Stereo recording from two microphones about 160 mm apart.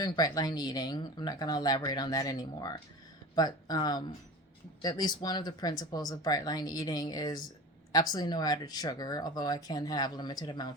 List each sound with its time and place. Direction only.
0.0 s speech: 25° left (ahead or behind)